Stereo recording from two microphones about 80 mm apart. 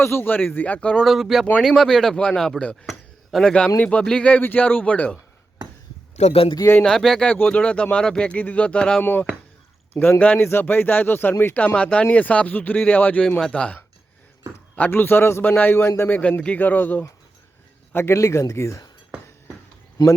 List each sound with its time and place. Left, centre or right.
0.0 s speech: left
1.0 s speech: centre
6.8 s speech: centre
7.3 s speech: centre
9.9 s speech: left
16.0 s speech: centre
17.9 s speech: left
20.0 s speech: left